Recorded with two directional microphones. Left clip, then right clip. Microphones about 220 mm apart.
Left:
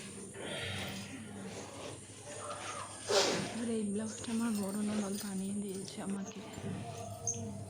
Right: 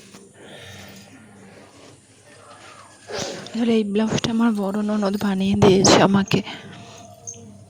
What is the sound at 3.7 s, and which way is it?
Speech, 45° right (ahead or behind).